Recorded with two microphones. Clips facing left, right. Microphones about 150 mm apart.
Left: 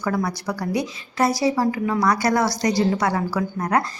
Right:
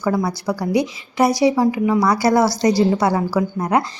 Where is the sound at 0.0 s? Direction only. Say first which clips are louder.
Right 4 dB; 25° right (ahead or behind).